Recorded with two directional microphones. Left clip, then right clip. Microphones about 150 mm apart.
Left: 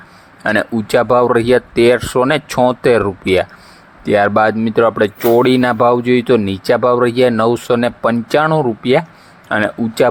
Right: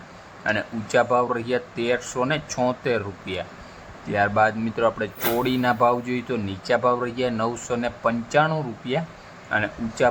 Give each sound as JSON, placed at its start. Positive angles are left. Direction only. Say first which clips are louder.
{"t": 0.4, "sound": "speech", "louder": "left 10 dB", "side_deg": 60}